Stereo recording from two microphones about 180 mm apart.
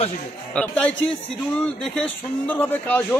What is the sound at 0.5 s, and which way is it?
A man's voice, 5° left (ahead or behind).